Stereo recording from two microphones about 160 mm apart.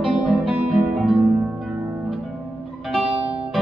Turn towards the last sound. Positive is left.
turn(degrees=0)  # may be behind; listen again after turning